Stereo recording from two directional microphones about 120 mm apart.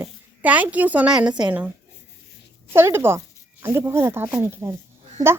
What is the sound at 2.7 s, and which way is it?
Speech, 20° right (ahead or behind).